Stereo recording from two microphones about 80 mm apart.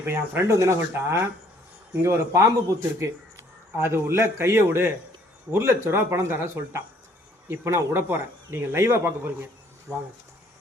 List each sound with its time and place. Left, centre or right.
0.0 s speech: right